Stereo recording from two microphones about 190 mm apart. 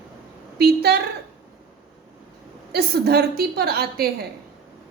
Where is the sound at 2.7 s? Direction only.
55° right (ahead or behind).